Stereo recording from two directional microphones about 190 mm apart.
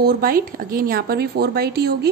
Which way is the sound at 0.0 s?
55° right (ahead or behind).